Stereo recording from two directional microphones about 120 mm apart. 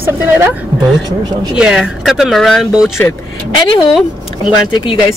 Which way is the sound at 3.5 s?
40° left (ahead or behind).